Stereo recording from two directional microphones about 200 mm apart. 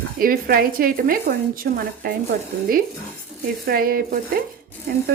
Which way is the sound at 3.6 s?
45° right (ahead or behind).